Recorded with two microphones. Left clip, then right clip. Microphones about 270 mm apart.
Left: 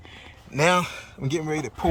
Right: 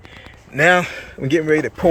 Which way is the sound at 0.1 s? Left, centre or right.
Centre.